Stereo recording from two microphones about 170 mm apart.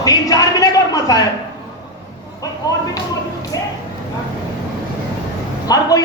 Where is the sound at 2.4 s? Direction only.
20° left (ahead or behind).